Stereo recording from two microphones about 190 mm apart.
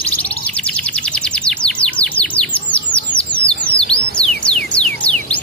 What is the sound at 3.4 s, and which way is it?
Bird, 30° left (ahead or behind).